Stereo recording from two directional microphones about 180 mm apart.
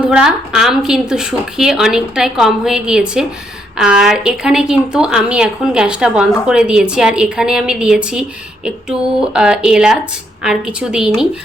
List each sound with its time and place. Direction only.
0.0 s a woman's voice: 5° right (ahead or behind)